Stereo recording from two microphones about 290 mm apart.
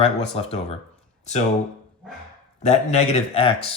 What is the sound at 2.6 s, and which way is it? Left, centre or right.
Speech, left.